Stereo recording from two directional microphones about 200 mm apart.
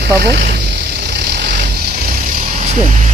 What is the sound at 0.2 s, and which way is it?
Vehicle, 50° right (ahead or behind).